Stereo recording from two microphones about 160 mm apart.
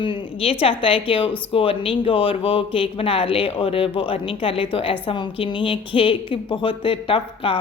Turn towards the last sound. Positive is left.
turn(degrees=35)  # may be behind; listen again after turning